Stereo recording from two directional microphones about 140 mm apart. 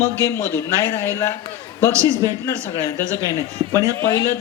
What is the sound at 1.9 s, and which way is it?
Speech, 20° right (ahead or behind).